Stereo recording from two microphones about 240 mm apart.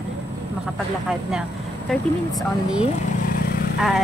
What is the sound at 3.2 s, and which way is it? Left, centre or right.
Vehicle, left.